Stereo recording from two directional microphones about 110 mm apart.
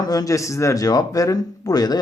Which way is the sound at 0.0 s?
35° left (ahead or behind).